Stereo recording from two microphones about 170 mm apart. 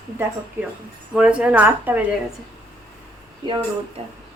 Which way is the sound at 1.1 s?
5° right (ahead or behind).